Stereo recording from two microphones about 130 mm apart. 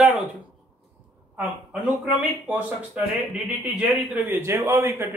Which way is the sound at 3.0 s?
10° right (ahead or behind).